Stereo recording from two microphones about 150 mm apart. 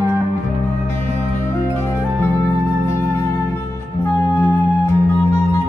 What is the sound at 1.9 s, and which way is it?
Music, 15° left (ahead or behind).